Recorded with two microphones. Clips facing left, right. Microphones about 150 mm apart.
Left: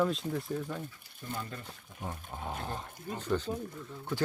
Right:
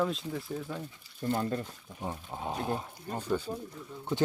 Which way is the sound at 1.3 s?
45° right (ahead or behind).